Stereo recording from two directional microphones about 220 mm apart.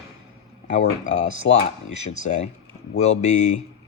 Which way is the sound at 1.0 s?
30° left (ahead or behind).